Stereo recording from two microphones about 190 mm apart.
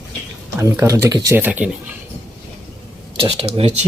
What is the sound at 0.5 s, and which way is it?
Speech, 15° right (ahead or behind).